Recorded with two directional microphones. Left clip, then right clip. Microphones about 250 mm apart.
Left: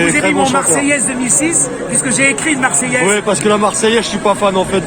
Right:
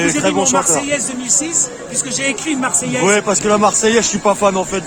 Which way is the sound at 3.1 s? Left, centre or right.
Right.